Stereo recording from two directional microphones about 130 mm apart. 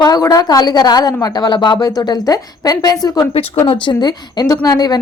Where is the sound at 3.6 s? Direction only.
40° left (ahead or behind).